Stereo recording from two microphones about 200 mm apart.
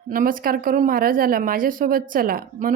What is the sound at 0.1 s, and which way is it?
A woman's voice, 45° right (ahead or behind).